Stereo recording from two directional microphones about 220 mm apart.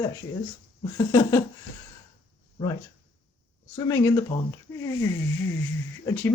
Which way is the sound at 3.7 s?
15° left (ahead or behind).